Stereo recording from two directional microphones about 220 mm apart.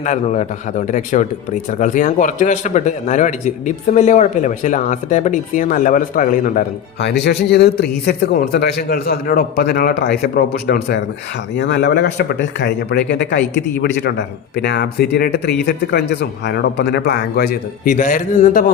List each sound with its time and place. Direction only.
0.0 s speech: 30° left (ahead or behind)
7.0 s a man's voice: 50° left (ahead or behind)